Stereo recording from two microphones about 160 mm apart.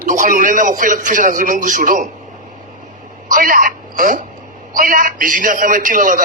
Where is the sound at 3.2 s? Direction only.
60° right (ahead or behind).